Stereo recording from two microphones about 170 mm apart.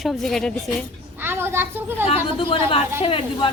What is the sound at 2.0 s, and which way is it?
A woman's voice, 30° left (ahead or behind).